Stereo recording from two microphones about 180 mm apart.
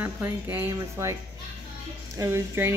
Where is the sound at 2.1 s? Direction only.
15° right (ahead or behind).